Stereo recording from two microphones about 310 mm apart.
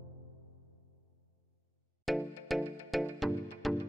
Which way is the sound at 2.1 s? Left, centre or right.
Centre.